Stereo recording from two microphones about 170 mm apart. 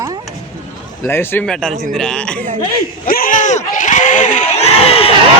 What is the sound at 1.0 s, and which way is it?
A man's voice, 10° left (ahead or behind).